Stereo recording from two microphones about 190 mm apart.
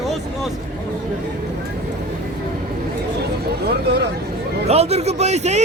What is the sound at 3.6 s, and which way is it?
Speech, 60° right (ahead or behind).